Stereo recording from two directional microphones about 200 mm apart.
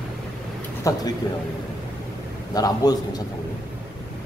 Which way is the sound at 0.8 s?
15° left (ahead or behind).